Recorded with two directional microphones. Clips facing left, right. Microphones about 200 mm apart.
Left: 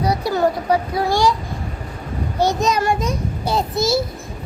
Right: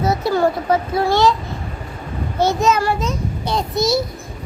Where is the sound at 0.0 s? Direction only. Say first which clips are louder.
Right 1 dB; 15° left (ahead or behind).